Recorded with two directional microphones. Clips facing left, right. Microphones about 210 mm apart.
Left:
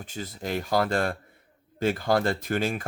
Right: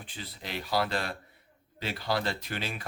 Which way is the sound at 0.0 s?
45° left (ahead or behind).